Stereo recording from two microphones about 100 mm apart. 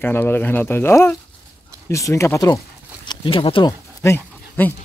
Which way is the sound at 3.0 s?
55° left (ahead or behind).